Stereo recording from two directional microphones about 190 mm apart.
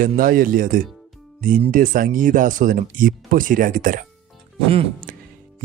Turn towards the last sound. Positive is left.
turn(degrees=-45)  # may be behind; listen again after turning